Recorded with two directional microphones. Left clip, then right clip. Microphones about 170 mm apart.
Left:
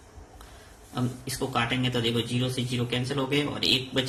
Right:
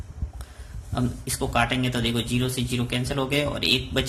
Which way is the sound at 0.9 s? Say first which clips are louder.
Right 3 dB; 45° right (ahead or behind).